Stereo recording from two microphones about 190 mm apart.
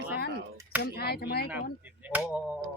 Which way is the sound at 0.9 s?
55° left (ahead or behind).